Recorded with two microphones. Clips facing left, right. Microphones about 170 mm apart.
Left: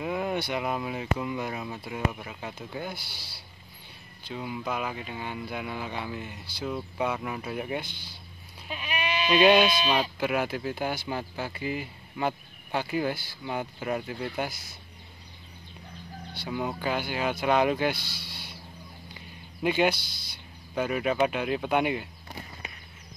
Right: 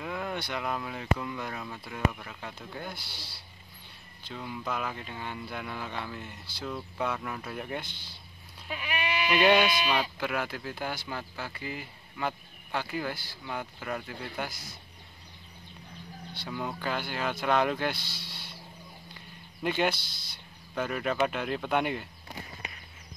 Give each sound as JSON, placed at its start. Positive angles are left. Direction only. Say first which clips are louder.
{"t": 0.0, "sound": "speech", "louder": "left 5 dB", "side_deg": 15}
{"t": 4.3, "sound": "speech", "louder": "left 3 dB", "side_deg": 10}
{"t": 8.6, "sound": "speech", "louder": "left 1 dB", "side_deg": 20}
{"t": 16.4, "sound": "speech", "louder": "left 4 dB", "side_deg": 15}
{"t": 18.0, "sound": "speech", "louder": "left 2 dB", "side_deg": -25}
{"t": 19.1, "sound": "a sound", "louder": "left 4 dB", "side_deg": 5}
{"t": 20.7, "sound": "speech", "louder": "left 3 dB", "side_deg": 10}